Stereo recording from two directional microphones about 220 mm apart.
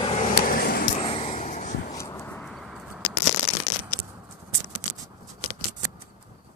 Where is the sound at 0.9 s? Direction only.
30° left (ahead or behind).